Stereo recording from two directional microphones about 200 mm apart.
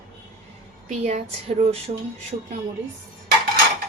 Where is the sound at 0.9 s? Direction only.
35° right (ahead or behind).